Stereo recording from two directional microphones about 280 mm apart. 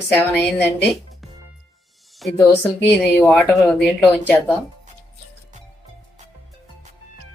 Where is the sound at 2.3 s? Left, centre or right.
Centre.